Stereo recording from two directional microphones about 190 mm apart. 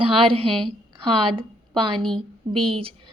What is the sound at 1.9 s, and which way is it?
Speech, centre (ahead or behind).